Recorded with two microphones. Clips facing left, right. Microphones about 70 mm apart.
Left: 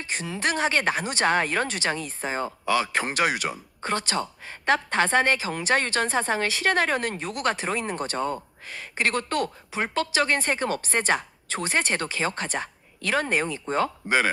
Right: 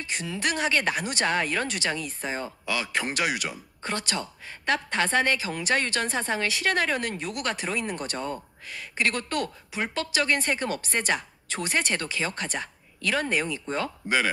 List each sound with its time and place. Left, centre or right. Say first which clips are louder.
0.0 s speech: left 2 dB; left